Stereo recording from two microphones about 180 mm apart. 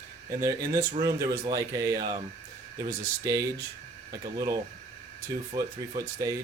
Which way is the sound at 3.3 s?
20° right (ahead or behind).